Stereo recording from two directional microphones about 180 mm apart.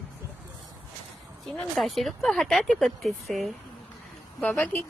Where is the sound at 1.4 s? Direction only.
Centre (ahead or behind).